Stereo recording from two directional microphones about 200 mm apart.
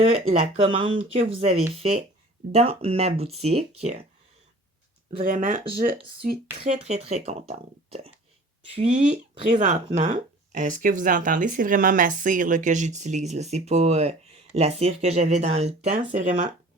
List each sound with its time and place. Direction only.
0.0 s speech: 30° right (ahead or behind)
5.2 s speech: 45° right (ahead or behind)
6.6 s speech: 35° right (ahead or behind)